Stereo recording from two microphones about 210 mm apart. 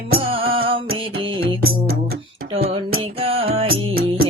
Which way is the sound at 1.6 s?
45° right (ahead or behind).